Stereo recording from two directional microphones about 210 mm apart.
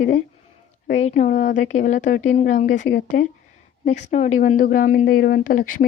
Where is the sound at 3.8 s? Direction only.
35° left (ahead or behind).